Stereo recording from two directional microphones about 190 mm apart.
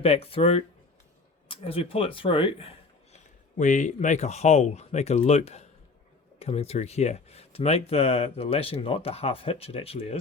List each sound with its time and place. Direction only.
0.0 s speech: 30° left (ahead or behind)
3.6 s speech: 40° left (ahead or behind)